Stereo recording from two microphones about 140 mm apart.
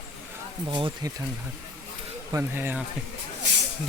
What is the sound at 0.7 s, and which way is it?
Speech, 35° right (ahead or behind).